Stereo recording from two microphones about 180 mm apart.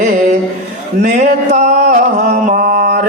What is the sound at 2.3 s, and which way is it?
Mantra, 45° right (ahead or behind).